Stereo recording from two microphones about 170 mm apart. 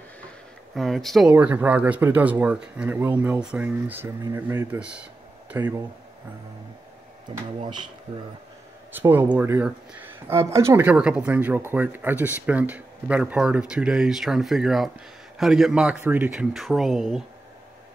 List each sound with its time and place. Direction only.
0.7 s speech: centre (ahead or behind)
1.3 s speech: 10° right (ahead or behind)
7.3 s speech: 30° right (ahead or behind)
9.1 s speech: 10° right (ahead or behind)